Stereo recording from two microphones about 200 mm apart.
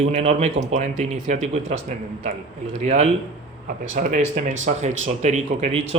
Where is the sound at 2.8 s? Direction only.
35° right (ahead or behind).